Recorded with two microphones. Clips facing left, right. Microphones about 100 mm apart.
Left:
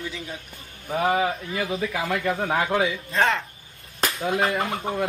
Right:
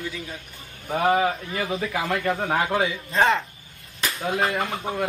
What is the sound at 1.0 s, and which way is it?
Speech, centre (ahead or behind).